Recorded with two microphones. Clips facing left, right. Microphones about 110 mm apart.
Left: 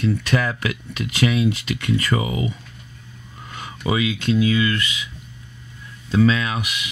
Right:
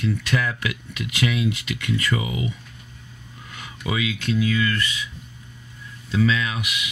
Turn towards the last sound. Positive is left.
turn(degrees=40)  # may be behind; listen again after turning